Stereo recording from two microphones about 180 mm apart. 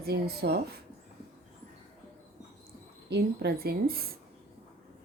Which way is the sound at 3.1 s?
65° right (ahead or behind).